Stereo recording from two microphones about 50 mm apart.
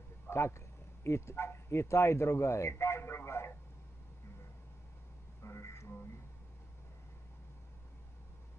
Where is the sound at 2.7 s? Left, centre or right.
Left.